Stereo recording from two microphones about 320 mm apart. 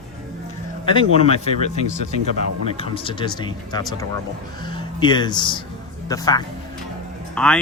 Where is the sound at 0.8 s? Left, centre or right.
Centre.